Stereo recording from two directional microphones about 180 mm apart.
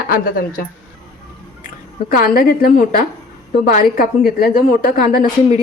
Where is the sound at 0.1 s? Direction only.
55° left (ahead or behind).